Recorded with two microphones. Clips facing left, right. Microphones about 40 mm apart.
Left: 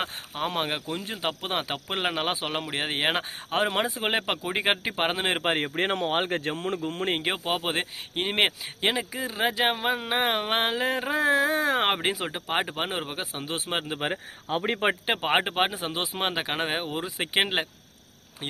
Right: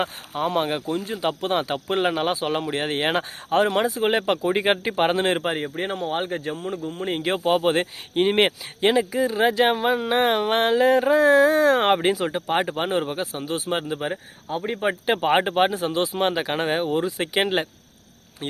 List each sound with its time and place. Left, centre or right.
0.4 s speech: left
5.5 s speech: left
7.3 s speech: centre
13.4 s speech: left
14.0 s speech: left
15.0 s speech: centre